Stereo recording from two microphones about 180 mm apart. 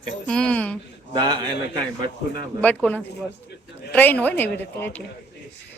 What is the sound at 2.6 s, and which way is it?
A woman's voice, 10° left (ahead or behind).